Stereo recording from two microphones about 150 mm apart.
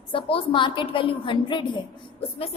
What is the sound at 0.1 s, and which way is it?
A woman's voice, 35° left (ahead or behind).